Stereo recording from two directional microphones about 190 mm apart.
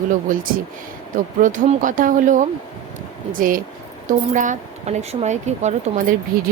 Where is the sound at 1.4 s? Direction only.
40° right (ahead or behind).